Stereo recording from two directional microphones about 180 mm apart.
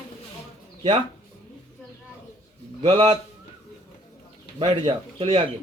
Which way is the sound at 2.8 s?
30° right (ahead or behind).